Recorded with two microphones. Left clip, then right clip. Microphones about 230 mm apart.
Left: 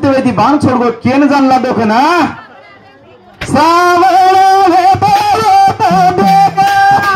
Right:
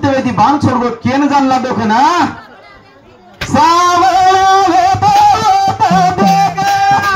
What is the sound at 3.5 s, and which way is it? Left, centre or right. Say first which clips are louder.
Music: left 1 dB; left.